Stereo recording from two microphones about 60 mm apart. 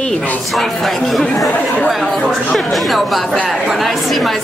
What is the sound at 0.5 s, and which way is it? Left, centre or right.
Speech, centre.